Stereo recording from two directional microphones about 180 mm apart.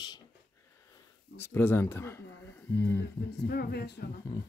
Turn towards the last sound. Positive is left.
turn(degrees=65)  # may be behind; listen again after turning